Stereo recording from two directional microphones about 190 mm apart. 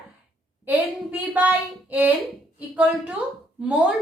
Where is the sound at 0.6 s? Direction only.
10° right (ahead or behind).